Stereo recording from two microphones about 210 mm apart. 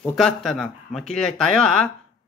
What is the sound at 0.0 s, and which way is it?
Speech, centre (ahead or behind).